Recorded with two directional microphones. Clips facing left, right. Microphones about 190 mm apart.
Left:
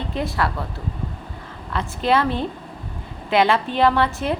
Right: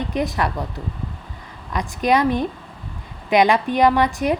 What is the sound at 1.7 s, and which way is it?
A woman's voice, 15° right (ahead or behind).